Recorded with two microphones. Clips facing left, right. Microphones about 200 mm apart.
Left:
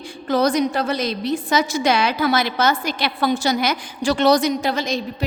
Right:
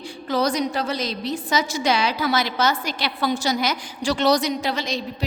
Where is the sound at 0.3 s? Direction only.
50° left (ahead or behind).